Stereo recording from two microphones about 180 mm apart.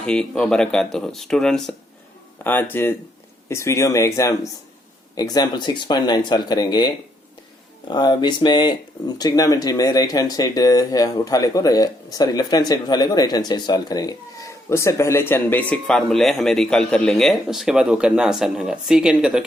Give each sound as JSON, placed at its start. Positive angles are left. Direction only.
{"t": 0.0, "sound": "speech", "side_deg": 5}